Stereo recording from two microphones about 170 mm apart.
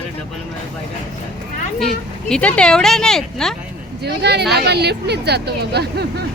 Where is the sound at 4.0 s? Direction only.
75° right (ahead or behind).